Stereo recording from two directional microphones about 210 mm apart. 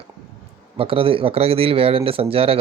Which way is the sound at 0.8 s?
25° right (ahead or behind).